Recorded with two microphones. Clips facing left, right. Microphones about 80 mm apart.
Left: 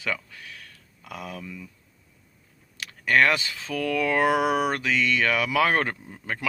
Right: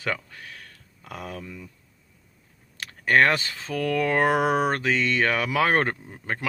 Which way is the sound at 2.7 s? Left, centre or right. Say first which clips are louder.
Right 1 dB; right.